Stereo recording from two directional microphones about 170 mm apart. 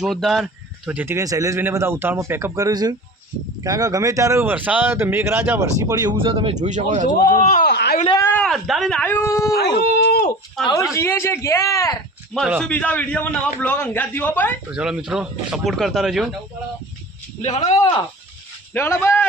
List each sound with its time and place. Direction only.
0.0 s speech: centre (ahead or behind); by 6.1 s 20° right (ahead or behind)
6.1 s a man's voice: 30° right (ahead or behind)
6.7 s speech: 45° right (ahead or behind)
7.1 s speech: 50° left (ahead or behind)
7.7 s speech: 75° left (ahead or behind)
8.2 s a man's voice: 10° left (ahead or behind)
10.1 s a sound: 65° left (ahead or behind)
10.6 s speech: centre (ahead or behind)
10.9 s a man's voice: 15° left (ahead or behind)
12.3 s a man's voice: centre (ahead or behind)
14.7 s speech: 5° right (ahead or behind)
17.4 s speech: 40° left (ahead or behind)
18.7 s a man's voice: 10° left (ahead or behind)